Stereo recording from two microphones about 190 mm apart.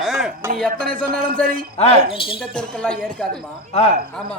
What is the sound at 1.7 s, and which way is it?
Speech, 30° left (ahead or behind).